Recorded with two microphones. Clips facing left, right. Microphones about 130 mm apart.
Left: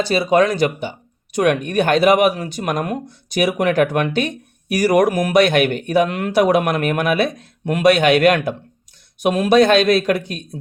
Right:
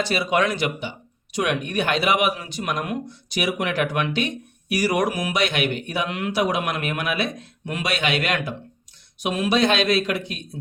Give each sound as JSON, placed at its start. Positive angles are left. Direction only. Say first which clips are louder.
{"t": 0.0, "sound": "speech", "louder": "left 6 dB", "side_deg": 35}